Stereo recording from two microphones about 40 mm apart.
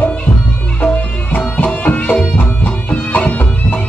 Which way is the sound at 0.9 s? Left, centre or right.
Left.